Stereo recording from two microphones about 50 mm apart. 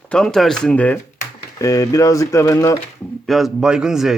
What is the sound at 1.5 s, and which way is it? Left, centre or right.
Speech, left.